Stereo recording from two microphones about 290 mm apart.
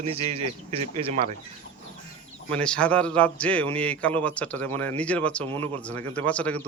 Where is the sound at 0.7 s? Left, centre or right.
Centre.